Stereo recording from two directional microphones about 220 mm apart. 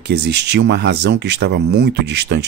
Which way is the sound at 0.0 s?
50° right (ahead or behind).